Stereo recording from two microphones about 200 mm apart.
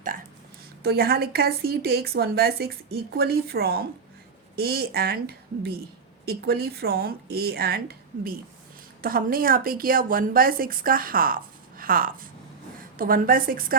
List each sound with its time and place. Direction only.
0.8 s a woman's voice: 50° right (ahead or behind)